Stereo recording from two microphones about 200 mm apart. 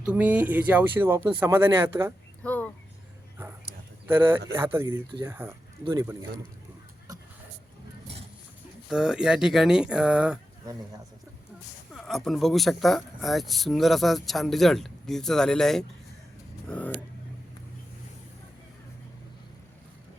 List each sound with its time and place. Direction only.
0.0 s speech: 5° right (ahead or behind)
2.4 s a sound: 5° left (ahead or behind)
4.0 s speech: 10° right (ahead or behind)
8.9 s speech: 5° right (ahead or behind)
11.9 s speech: centre (ahead or behind)